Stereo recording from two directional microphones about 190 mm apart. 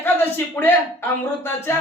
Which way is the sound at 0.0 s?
10° left (ahead or behind).